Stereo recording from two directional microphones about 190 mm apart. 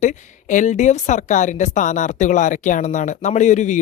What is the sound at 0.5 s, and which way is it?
Speech, 40° left (ahead or behind).